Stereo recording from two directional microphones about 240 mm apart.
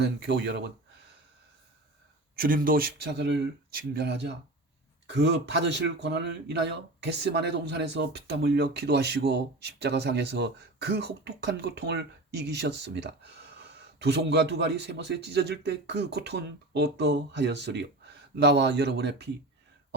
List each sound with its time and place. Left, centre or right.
0.0 s a man's voice: right
2.4 s a man's voice: right